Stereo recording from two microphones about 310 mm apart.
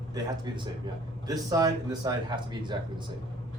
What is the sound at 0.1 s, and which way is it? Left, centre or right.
A man's voice, centre.